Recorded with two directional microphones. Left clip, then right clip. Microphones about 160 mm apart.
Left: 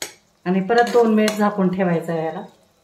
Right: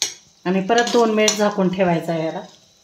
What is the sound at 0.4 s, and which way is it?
Speech, 55° right (ahead or behind).